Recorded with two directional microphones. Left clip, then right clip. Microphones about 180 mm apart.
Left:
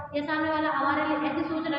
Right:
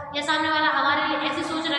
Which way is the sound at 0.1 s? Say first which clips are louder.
Right 5 dB; 40° left (ahead or behind).